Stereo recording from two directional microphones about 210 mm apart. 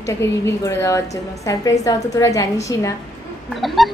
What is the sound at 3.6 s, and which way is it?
Speech, centre (ahead or behind).